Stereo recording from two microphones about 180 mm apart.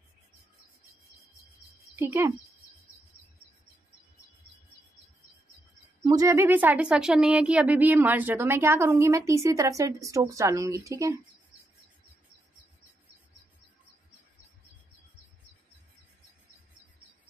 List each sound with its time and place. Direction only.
2.0 s speech: 15° right (ahead or behind)
6.0 s speech: 20° right (ahead or behind)